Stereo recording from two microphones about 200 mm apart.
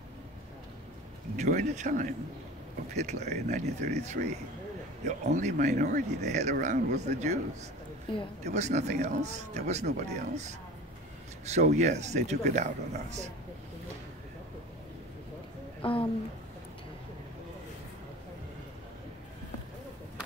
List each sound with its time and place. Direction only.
1.3 s speech: 35° right (ahead or behind)
8.1 s speech: 25° left (ahead or behind)
8.5 s speech: 35° right (ahead or behind)
11.4 s speech: 35° right (ahead or behind)
15.8 s speech: 25° left (ahead or behind)